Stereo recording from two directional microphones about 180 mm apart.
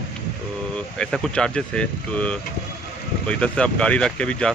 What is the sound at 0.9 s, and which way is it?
Speech, 5° left (ahead or behind).